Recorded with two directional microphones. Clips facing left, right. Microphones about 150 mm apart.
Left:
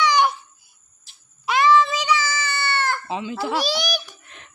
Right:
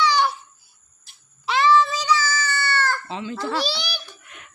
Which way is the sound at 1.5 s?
15° left (ahead or behind).